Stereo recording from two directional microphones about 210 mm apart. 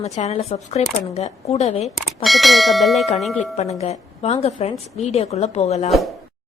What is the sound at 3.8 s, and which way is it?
Speech, 30° left (ahead or behind).